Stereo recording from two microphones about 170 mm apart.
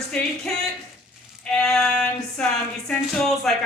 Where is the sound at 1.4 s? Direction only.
5° left (ahead or behind).